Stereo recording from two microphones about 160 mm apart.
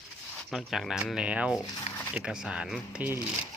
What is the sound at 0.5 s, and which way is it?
Speech, centre (ahead or behind).